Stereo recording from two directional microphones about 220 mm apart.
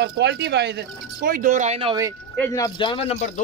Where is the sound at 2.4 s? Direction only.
15° left (ahead or behind).